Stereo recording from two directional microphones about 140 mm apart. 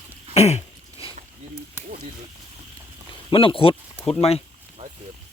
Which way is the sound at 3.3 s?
40° left (ahead or behind).